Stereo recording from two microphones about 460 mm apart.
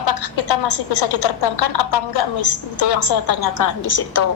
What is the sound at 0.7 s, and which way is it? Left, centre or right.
A woman's voice, left.